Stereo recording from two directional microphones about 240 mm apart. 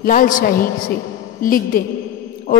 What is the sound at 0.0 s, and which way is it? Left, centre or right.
A man's voice, left.